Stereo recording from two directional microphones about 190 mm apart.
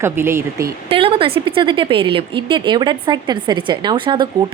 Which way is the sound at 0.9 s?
30° right (ahead or behind).